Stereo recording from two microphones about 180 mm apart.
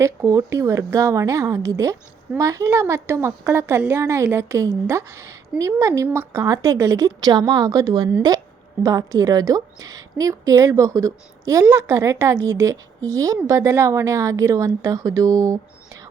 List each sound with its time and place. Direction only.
0.0 s a woman's voice: 15° right (ahead or behind)